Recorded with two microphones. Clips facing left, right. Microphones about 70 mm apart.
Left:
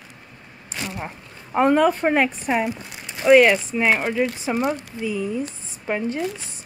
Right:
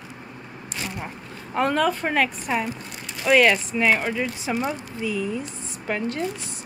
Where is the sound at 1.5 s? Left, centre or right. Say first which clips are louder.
Left 5 dB; centre.